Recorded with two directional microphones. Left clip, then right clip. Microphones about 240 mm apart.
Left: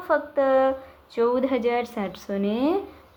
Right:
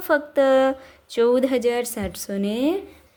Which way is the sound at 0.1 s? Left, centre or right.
Right.